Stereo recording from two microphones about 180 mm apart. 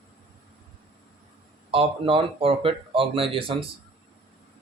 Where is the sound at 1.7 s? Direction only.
30° right (ahead or behind).